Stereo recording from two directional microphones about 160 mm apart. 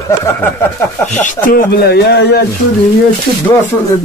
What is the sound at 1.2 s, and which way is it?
Speech, 60° left (ahead or behind).